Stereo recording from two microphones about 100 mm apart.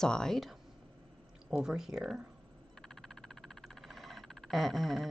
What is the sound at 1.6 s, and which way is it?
Speech, 5° right (ahead or behind).